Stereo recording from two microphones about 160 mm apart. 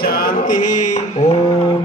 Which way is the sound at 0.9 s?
45° left (ahead or behind).